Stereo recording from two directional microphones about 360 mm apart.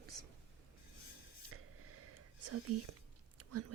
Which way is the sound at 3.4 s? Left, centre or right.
Right.